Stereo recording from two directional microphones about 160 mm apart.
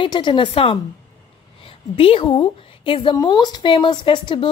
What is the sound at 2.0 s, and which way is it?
A woman's voice, 35° left (ahead or behind).